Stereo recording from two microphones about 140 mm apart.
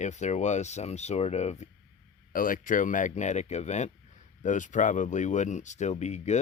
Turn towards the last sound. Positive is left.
turn(degrees=55)  # may be behind; listen again after turning